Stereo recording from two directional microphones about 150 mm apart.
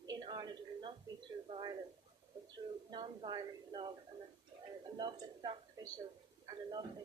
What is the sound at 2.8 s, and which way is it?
A woman's voice, 30° right (ahead or behind).